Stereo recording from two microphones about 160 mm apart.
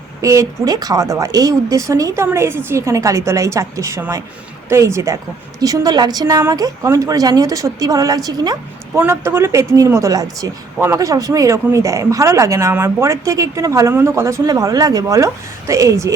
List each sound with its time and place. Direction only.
0.2 s a woman's voice: 20° right (ahead or behind)